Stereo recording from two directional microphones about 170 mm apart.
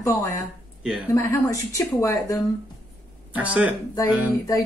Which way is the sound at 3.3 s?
10° right (ahead or behind).